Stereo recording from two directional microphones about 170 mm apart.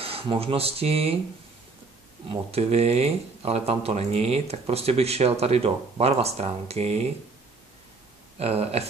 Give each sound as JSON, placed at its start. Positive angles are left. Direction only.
{"t": 0.0, "sound": "speech", "side_deg": -35}
{"t": 2.2, "sound": "speech", "side_deg": -35}
{"t": 8.4, "sound": "speech", "side_deg": -35}